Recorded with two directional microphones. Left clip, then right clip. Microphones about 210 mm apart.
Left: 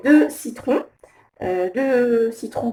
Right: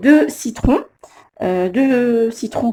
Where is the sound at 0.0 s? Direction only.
50° right (ahead or behind).